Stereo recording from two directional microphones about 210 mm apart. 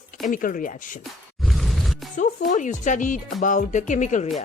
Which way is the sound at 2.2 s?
35° left (ahead or behind).